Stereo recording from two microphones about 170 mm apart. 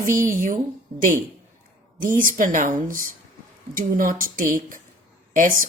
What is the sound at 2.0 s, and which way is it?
Speech, 50° right (ahead or behind).